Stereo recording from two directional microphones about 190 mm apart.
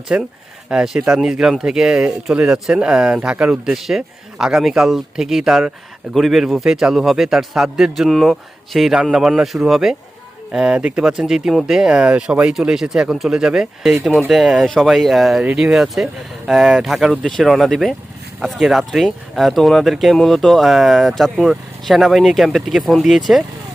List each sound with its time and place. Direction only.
0.1 s speech: 5° right (ahead or behind)